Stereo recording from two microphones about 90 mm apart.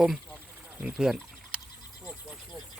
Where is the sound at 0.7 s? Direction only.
15° right (ahead or behind).